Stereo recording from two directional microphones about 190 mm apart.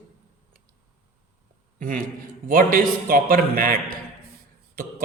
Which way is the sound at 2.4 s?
50° right (ahead or behind).